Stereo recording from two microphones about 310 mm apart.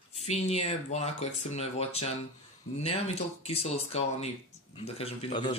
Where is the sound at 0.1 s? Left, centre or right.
Left.